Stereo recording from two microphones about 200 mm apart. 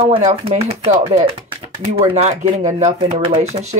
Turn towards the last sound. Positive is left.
turn(degrees=-35)  # may be behind; listen again after turning